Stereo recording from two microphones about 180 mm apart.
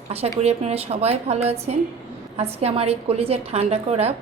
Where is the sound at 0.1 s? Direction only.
35° right (ahead or behind).